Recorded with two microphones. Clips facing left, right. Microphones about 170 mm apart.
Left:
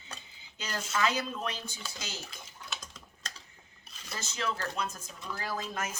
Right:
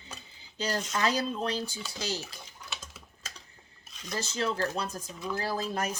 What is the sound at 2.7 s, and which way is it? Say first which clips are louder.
Typing: even; 10° right (ahead or behind).